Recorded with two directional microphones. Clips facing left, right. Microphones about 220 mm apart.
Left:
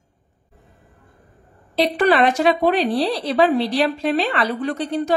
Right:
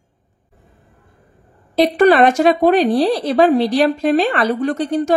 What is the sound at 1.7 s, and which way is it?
A woman's voice, 45° right (ahead or behind).